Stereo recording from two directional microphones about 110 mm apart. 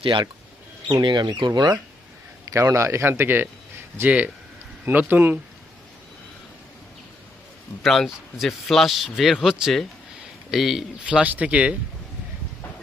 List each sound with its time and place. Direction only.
0.0 s speech: 50° right (ahead or behind)
2.5 s speech: 30° right (ahead or behind)
7.8 s a man's voice: centre (ahead or behind)